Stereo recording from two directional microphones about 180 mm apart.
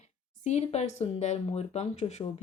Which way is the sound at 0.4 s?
40° left (ahead or behind).